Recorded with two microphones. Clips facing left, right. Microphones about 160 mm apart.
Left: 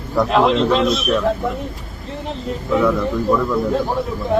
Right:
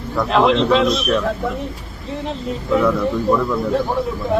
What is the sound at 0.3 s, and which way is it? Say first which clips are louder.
A man's voice: right 2 dB; centre (ahead or behind).